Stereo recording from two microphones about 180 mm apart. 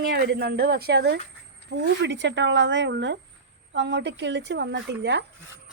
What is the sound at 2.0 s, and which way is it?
Speech, 85° right.